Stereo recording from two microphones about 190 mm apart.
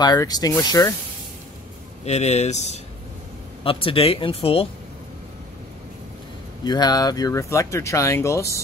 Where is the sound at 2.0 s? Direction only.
35° left (ahead or behind).